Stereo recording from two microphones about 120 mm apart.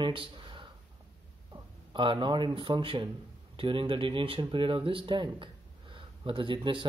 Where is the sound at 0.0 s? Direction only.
45° right (ahead or behind).